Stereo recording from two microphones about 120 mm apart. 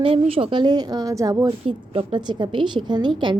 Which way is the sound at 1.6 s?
50° right (ahead or behind).